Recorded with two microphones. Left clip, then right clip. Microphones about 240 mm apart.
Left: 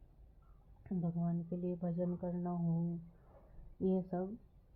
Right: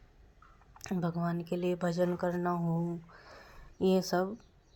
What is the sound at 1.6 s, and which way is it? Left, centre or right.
Speech, right.